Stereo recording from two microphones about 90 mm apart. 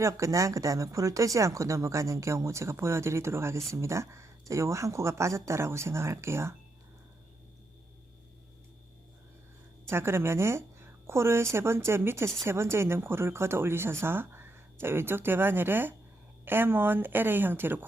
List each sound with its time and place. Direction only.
0.0 s speech: 35° right (ahead or behind)
9.8 s a woman's voice: 30° right (ahead or behind)